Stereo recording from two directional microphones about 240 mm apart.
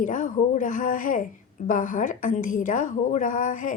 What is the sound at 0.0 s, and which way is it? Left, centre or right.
A woman's voice, left.